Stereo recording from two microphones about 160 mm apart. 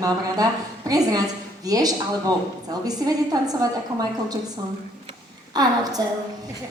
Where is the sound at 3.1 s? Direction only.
25° right (ahead or behind).